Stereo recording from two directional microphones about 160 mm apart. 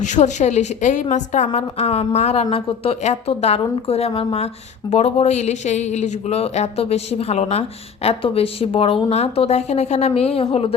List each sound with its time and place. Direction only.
0.0 s speech: 50° left (ahead or behind)
1.5 s a woman's voice: 40° left (ahead or behind)